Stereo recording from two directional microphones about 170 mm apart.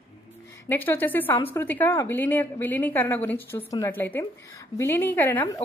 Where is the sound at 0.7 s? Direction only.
10° left (ahead or behind).